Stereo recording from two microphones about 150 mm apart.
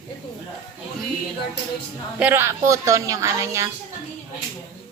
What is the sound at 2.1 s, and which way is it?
A woman's voice, 10° right (ahead or behind).